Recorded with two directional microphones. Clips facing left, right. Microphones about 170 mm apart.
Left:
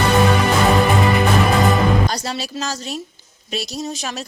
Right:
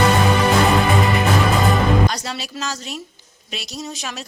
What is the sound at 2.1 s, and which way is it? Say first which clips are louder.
Music: left 3 dB; 35° left (ahead or behind).